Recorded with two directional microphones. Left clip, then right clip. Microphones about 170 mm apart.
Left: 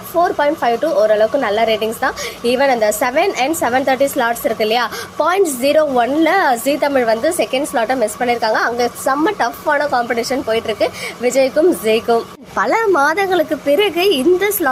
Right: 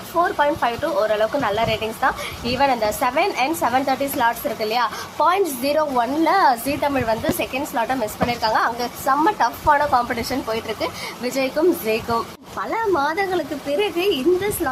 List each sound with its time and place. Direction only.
0.2 s a woman's voice: 20° left (ahead or behind)
12.5 s speech: 35° left (ahead or behind)